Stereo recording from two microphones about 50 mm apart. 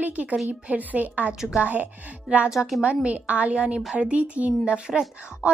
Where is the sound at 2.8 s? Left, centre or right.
Right.